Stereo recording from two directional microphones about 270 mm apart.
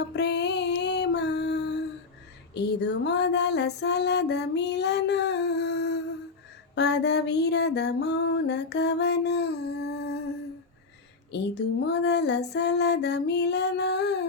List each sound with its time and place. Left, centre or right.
0.0 s a sound: left
2.6 s music: left
11.3 s music: left